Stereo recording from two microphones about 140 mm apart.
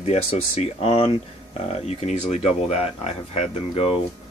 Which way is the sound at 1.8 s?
55° left (ahead or behind).